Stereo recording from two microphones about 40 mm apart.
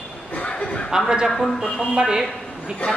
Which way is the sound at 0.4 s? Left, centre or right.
Left.